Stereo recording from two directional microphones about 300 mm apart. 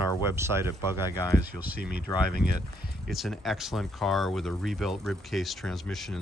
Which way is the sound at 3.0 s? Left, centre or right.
Centre.